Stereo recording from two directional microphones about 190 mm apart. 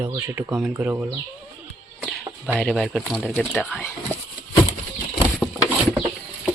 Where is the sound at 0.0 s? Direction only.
15° right (ahead or behind).